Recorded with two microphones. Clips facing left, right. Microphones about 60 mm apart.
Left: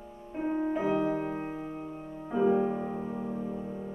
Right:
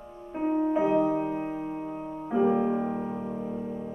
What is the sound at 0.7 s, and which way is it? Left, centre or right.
Music, centre.